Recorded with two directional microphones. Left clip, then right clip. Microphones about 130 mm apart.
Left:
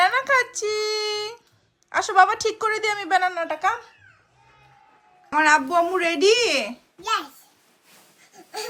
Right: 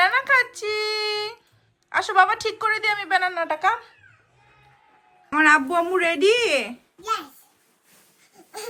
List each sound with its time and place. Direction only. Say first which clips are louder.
0.0 s a sound: right 1 dB; 30° left (ahead or behind)
1.9 s a woman's voice: left 1 dB; 30° left (ahead or behind)
5.3 s a child's voice: right 1 dB; 10° left (ahead or behind)